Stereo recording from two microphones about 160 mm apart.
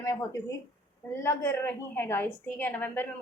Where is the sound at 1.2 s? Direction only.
15° left (ahead or behind).